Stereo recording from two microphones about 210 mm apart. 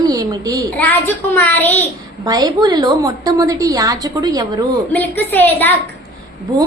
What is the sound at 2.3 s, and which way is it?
A woman's voice, 20° right (ahead or behind).